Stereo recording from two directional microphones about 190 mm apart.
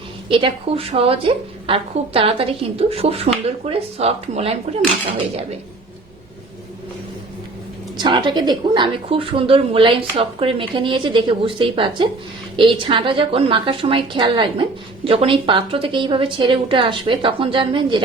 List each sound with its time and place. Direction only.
0.3 s a woman's voice: 30° right (ahead or behind)
7.9 s a woman's voice: 25° right (ahead or behind)